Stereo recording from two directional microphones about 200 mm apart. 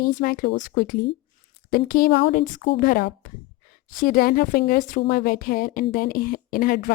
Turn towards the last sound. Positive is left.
turn(degrees=45)  # may be behind; listen again after turning